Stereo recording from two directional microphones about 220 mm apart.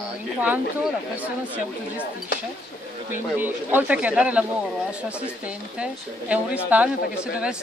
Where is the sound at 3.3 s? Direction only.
10° right (ahead or behind).